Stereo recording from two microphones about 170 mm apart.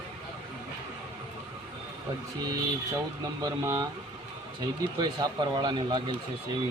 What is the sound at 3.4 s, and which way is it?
Speech, 20° right (ahead or behind).